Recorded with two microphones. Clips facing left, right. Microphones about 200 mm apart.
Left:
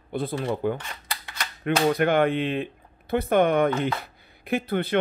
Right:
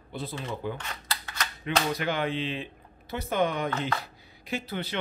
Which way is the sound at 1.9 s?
55° left (ahead or behind).